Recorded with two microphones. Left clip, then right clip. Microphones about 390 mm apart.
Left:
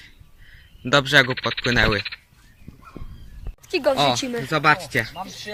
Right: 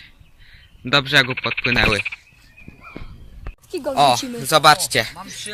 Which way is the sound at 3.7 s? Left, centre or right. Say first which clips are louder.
Left 5 dB; left.